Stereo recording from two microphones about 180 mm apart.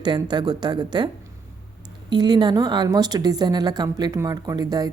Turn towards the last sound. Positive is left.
turn(degrees=-20)  # may be behind; listen again after turning